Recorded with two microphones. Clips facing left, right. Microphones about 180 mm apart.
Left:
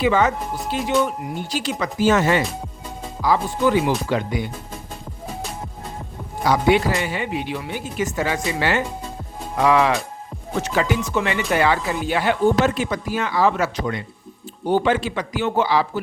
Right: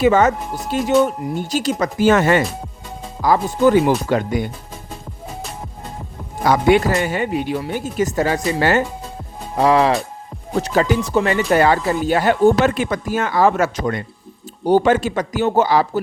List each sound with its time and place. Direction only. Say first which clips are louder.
0.0 s speech: right 4 dB; 45° right (ahead or behind)
6.4 s speech: right 3 dB; 50° right (ahead or behind)
12.6 s speech: right 3 dB; 55° right (ahead or behind)